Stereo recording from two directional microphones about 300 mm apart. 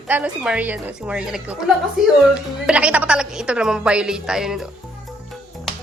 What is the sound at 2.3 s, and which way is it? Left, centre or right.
A woman's voice, centre.